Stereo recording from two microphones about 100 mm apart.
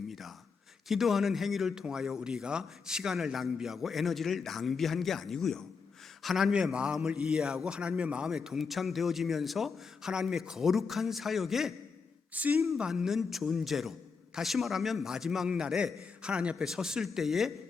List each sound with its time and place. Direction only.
0.1 s a sound: centre (ahead or behind)
0.9 s a man's voice: centre (ahead or behind)
12.3 s speech: 15° right (ahead or behind)
12.6 s a man's voice: centre (ahead or behind)